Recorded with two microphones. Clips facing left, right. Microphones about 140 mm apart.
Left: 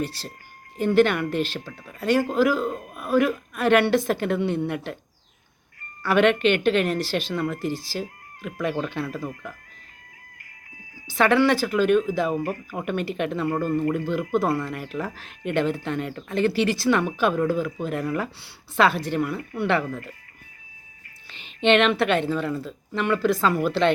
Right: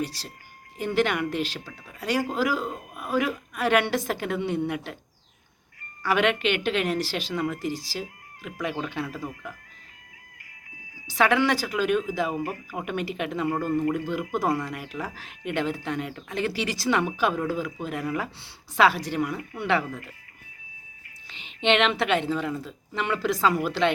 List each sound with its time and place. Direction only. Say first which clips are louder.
0.0 s speech: left 2 dB; 55° left (ahead or behind)
0.9 s speech: left 5 dB; 15° right (ahead or behind)
1.3 s speech: left 3 dB; 55° left (ahead or behind)
1.5 s speech: left 4 dB; 10° right (ahead or behind)
6.0 s speech: left 4 dB; 15° right (ahead or behind)
7.6 s speech: left 3 dB; 55° left (ahead or behind)
8.4 s speech: left 4 dB; 10° right (ahead or behind)
10.9 s a sound: left 2 dB; 55° left (ahead or behind)
11.3 s speech: left 8 dB; 10° right (ahead or behind)
21.2 s speech: left 4 dB; 15° right (ahead or behind)